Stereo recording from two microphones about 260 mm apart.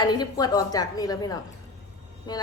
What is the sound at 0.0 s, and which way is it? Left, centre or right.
A woman's voice, centre.